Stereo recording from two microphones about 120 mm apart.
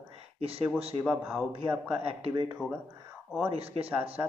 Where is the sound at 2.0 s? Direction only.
55° right (ahead or behind).